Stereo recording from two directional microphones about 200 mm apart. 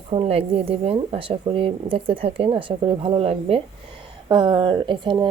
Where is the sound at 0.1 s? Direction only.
30° right (ahead or behind).